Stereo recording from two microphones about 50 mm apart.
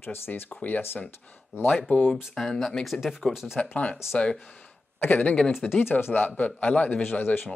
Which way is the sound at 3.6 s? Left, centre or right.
Left.